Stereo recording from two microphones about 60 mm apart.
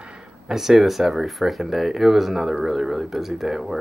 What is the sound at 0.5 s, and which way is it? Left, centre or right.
Speech, centre.